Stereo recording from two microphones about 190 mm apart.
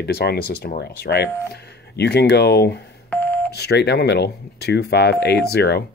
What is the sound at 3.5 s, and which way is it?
Speech, 60° left (ahead or behind).